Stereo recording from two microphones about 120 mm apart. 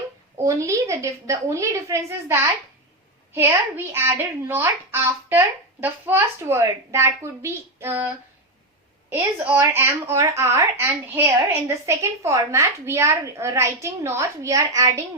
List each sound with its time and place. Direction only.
0.4 s a child's voice: 25° right (ahead or behind)